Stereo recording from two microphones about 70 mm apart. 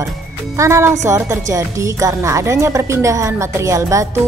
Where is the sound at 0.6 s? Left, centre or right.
Right.